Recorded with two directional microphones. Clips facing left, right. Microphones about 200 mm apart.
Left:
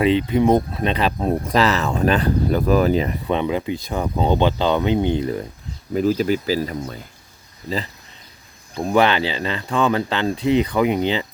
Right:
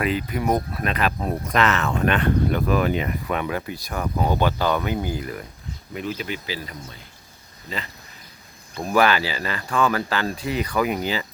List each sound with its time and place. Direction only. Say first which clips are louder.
0.0 s speech: left 7 dB; 25° left (ahead or behind)
8.7 s speech: left 2 dB; 20° left (ahead or behind)